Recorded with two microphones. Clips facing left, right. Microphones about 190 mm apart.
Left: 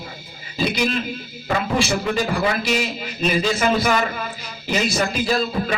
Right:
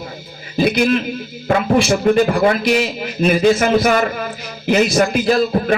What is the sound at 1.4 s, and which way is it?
A man's voice, 55° right (ahead or behind).